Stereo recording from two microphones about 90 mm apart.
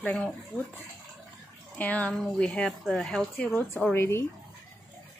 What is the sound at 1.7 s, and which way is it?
Speech, 15° left (ahead or behind).